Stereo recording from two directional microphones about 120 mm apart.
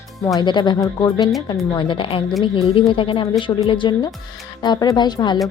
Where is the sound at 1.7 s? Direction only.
45° left (ahead or behind).